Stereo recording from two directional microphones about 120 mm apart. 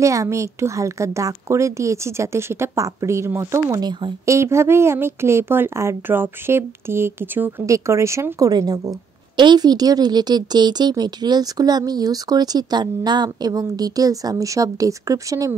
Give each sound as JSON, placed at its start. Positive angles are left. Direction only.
{"t": 0.0, "sound": "a woman's voice", "side_deg": -25}